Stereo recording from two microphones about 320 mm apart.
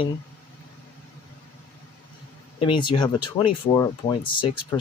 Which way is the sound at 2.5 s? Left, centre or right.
Centre.